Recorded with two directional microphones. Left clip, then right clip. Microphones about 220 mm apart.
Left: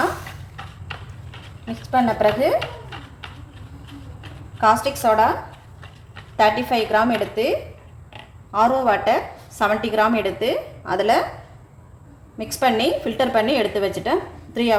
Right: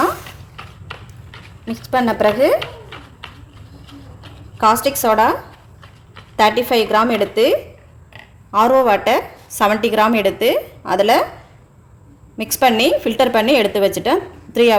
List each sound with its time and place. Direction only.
1.7 s a woman's voice: 55° right (ahead or behind)
4.5 s a woman's voice: 55° right (ahead or behind)
8.5 s a woman's voice: 55° right (ahead or behind)
12.4 s a woman's voice: 55° right (ahead or behind)